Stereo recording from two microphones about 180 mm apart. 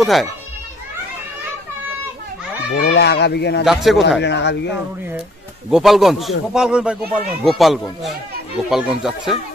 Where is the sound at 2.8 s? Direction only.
65° left (ahead or behind).